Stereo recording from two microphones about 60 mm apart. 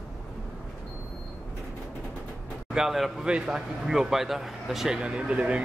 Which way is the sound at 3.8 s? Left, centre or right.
Centre.